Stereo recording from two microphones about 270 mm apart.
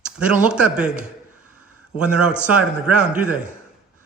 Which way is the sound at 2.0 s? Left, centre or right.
Centre.